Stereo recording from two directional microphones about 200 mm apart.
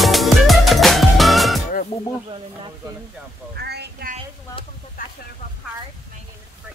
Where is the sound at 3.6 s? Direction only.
55° right (ahead or behind).